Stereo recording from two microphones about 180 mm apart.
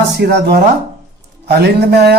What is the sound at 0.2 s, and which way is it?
Mantra, 65° right (ahead or behind).